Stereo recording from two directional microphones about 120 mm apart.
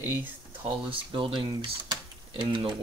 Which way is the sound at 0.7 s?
45° right (ahead or behind).